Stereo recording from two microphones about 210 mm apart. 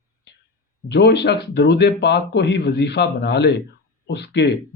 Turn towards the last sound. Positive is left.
turn(degrees=55)  # may be behind; listen again after turning